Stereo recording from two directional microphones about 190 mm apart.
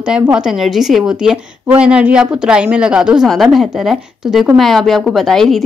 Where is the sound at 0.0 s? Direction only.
5° right (ahead or behind).